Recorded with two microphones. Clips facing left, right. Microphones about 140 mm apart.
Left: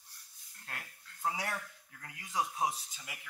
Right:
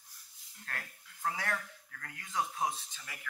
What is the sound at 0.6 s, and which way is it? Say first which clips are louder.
Speech: right 3 dB; 15° left (ahead or behind).